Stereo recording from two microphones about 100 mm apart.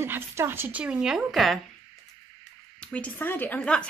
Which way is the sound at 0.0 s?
25° right (ahead or behind).